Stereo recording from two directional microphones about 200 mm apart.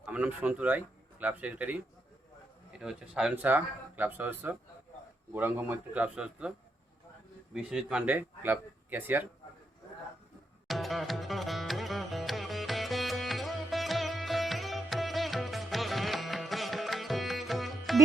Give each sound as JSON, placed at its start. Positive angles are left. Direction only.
{"t": 0.0, "sound": "a man's voice", "side_deg": -5}
{"t": 7.5, "sound": "a man's voice", "side_deg": -5}
{"t": 10.7, "sound": "music", "side_deg": 0}